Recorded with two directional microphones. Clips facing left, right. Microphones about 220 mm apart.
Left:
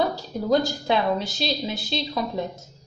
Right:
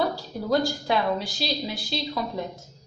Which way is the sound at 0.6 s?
25° left (ahead or behind).